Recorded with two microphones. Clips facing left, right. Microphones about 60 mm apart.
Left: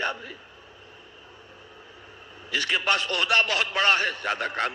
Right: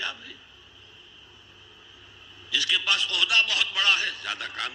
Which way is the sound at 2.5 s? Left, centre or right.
Left.